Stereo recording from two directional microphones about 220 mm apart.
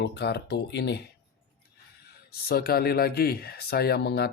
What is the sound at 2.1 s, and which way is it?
Speech, 45° left (ahead or behind).